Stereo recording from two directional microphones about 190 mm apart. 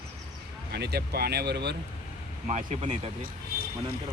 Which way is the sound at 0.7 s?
60° right (ahead or behind).